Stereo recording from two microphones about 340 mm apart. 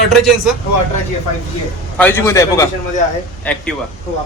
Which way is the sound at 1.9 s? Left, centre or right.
Centre.